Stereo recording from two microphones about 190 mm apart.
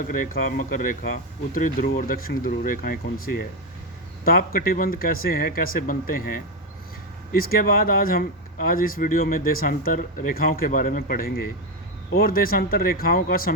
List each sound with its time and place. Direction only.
0.0 s speech: 45° left (ahead or behind)
7.3 s speech: 50° left (ahead or behind)